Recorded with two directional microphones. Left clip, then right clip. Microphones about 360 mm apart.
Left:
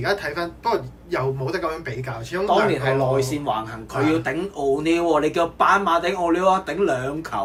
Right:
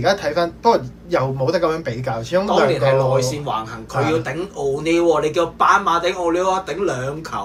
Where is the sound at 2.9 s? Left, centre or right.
Left.